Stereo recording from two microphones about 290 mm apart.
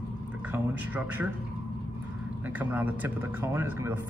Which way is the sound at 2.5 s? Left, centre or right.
Centre.